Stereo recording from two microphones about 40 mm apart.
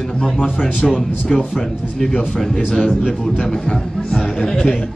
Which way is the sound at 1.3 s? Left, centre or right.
Centre.